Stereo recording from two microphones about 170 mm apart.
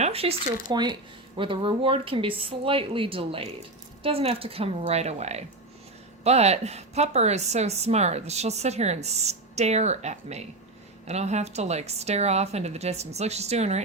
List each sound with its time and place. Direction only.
0.0 s a woman's voice: 35° right (ahead or behind)